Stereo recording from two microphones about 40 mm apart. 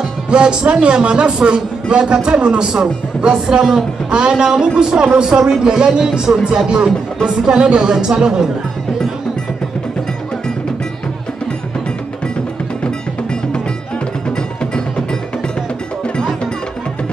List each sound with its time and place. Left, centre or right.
0.3 s a man's voice: right
12.8 s music: left
14.6 s music: left